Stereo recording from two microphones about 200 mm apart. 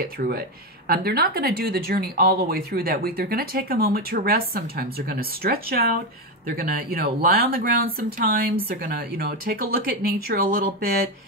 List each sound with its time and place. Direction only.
0.0 s speech: 50° right (ahead or behind)